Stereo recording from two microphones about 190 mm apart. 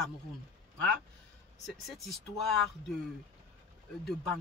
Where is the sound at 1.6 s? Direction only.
Centre (ahead or behind).